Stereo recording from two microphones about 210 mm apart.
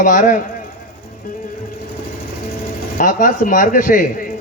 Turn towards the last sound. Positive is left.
turn(degrees=40)  # may be behind; listen again after turning